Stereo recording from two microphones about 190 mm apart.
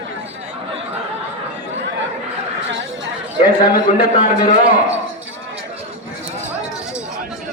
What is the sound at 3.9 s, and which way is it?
Speech, 45° left (ahead or behind).